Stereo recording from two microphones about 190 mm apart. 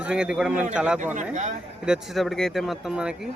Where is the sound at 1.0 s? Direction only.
40° right (ahead or behind).